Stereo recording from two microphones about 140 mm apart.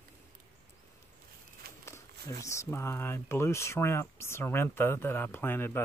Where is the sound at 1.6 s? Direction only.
90° right.